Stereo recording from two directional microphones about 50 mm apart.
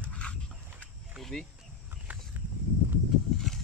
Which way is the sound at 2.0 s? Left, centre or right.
Right.